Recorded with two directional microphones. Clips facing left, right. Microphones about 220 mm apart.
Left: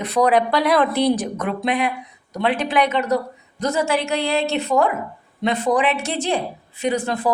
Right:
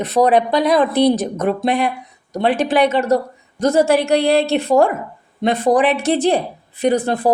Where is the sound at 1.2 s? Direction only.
45° right (ahead or behind).